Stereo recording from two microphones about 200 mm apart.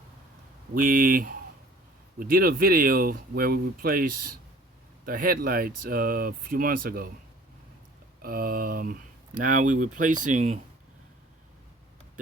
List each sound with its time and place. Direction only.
0.7 s speech: 45° right (ahead or behind)
8.2 s speech: 50° right (ahead or behind)